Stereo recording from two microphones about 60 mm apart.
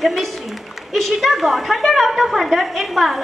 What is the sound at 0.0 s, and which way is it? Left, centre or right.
A woman's voice, centre.